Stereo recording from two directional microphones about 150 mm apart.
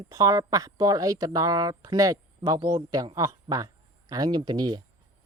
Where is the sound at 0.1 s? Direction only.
25° right (ahead or behind).